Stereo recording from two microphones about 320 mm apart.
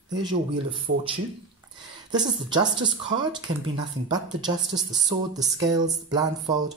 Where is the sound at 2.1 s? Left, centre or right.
Centre.